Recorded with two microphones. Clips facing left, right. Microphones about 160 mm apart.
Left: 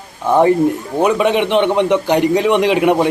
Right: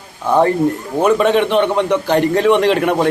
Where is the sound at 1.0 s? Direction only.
15° left (ahead or behind).